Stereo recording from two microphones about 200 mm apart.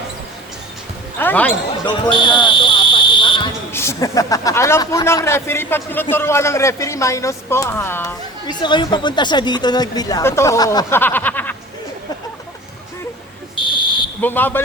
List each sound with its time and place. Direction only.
1.2 s speech: 10° left (ahead or behind)
1.9 s basketball bounce: 25° left (ahead or behind)
3.7 s speech: 10° left (ahead or behind)
13.6 s fire alarm: 25° left (ahead or behind)
14.2 s speech: 10° left (ahead or behind)